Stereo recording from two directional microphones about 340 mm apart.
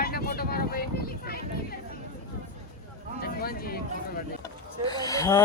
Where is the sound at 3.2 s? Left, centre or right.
Left.